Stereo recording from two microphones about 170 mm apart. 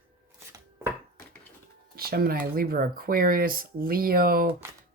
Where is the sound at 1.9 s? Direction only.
65° right (ahead or behind).